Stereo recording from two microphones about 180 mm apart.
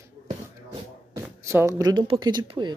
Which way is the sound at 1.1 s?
15° right (ahead or behind).